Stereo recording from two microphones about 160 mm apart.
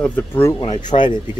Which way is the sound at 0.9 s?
35° left (ahead or behind).